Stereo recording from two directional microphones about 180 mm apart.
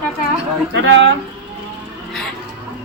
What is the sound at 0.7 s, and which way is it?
Speech, 80° right.